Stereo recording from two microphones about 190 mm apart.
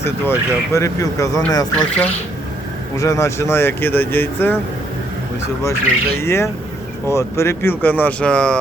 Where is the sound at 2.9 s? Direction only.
15° left (ahead or behind).